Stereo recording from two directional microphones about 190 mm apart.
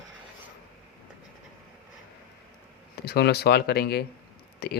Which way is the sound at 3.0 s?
55° left (ahead or behind).